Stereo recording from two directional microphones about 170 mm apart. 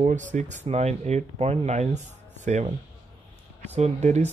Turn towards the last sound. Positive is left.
turn(degrees=-40)  # may be behind; listen again after turning